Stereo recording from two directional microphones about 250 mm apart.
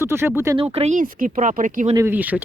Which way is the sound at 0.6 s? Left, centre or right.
Right.